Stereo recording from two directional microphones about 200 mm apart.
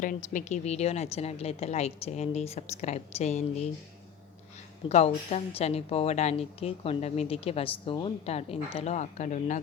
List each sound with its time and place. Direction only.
0.0 s a woman's voice: 40° left (ahead or behind)
4.9 s a woman's voice: 35° left (ahead or behind)